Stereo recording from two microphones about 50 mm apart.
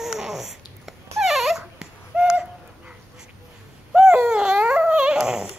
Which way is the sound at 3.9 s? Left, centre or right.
Centre.